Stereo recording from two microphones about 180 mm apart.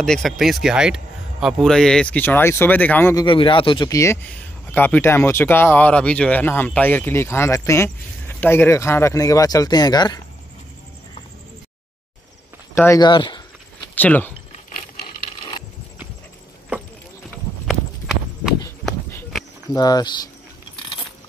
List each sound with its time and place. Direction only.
0.0 s speech: 5° left (ahead or behind)
3.3 s speech: 30° left (ahead or behind)
12.7 s speech: 15° left (ahead or behind)
13.0 s speech: 25° left (ahead or behind)
13.9 s speech: 10° left (ahead or behind)
17.6 s horse: centre (ahead or behind)
19.7 s speech: 20° left (ahead or behind)